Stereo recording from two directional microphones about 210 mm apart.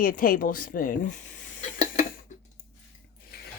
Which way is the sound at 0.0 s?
40° left (ahead or behind).